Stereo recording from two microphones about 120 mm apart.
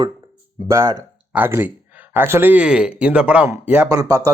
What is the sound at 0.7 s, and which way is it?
Speech, 25° right (ahead or behind).